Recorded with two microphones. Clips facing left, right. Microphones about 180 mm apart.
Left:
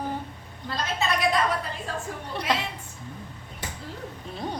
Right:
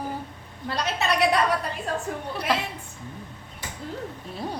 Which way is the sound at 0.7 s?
70° right (ahead or behind).